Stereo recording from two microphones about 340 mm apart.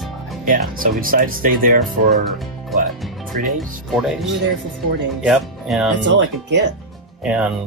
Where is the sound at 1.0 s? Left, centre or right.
Right.